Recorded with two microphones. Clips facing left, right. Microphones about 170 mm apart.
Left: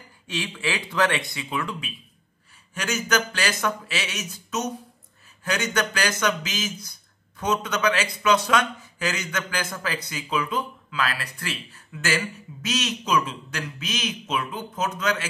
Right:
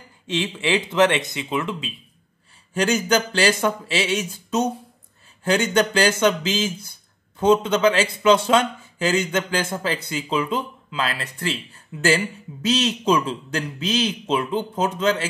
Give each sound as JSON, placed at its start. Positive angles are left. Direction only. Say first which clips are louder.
{"t": 0.3, "sound": "speech", "louder": "right 7 dB", "side_deg": -20}
{"t": 2.7, "sound": "a man's voice", "louder": "right 6 dB", "side_deg": -30}